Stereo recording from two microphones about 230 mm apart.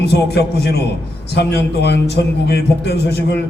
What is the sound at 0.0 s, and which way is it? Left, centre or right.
A man's voice, left.